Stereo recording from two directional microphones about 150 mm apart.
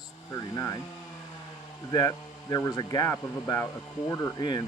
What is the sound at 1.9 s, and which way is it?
Speech, 25° left (ahead or behind).